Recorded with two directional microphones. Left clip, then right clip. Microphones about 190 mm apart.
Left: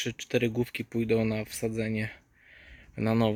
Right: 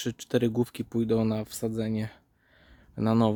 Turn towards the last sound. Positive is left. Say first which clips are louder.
# right 2 dB
turn(degrees=-25)  # may be behind; listen again after turning